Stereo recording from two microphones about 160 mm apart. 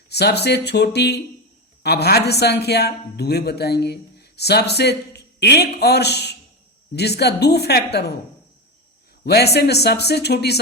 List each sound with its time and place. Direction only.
0.1 s a man's voice: 90° left
9.2 s a man's voice: 90° left